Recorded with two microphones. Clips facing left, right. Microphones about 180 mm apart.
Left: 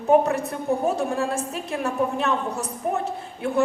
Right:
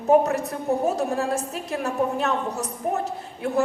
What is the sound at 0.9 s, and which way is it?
A woman's voice, 40° right (ahead or behind).